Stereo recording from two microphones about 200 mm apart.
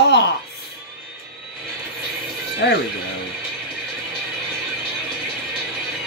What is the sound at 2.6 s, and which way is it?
Speech, 60° left (ahead or behind).